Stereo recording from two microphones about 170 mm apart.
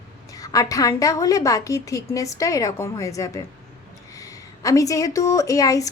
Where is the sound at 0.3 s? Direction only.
20° left (ahead or behind).